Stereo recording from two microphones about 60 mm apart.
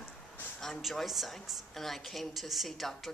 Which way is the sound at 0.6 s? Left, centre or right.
Centre.